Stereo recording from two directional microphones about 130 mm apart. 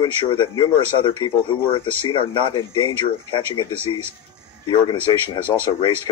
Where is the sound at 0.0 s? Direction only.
40° left (ahead or behind).